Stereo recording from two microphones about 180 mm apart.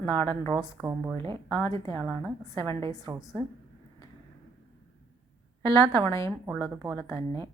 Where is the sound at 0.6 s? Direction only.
5° right (ahead or behind).